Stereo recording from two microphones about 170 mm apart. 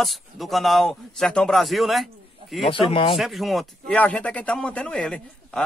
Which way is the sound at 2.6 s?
35° left (ahead or behind).